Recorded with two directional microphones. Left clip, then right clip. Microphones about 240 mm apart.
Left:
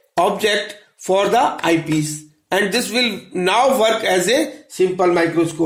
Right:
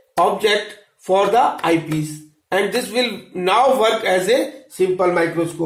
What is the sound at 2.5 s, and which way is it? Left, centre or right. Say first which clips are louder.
A man's voice: left 1 dB; left.